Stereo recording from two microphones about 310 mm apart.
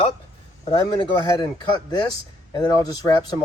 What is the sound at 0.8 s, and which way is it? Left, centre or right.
Speech, centre.